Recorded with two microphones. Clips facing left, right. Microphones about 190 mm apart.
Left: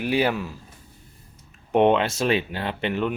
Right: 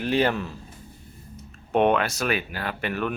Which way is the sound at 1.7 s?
20° left (ahead or behind).